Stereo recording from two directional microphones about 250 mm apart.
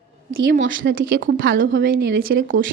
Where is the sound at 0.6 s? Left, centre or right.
Right.